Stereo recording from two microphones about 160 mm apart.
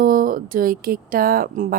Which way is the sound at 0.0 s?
60° right (ahead or behind).